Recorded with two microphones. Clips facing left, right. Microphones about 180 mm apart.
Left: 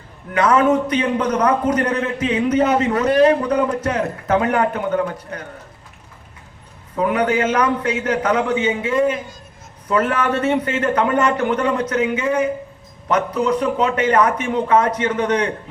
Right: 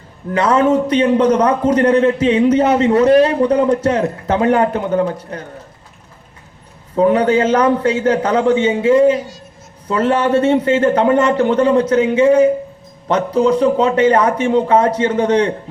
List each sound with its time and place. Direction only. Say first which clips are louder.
0.3 s a man's voice: right 2 dB; 30° right (ahead or behind)
6.9 s a man's voice: right 6 dB; 30° right (ahead or behind)